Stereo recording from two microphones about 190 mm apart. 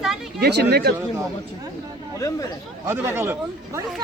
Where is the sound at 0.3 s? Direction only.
60° right (ahead or behind).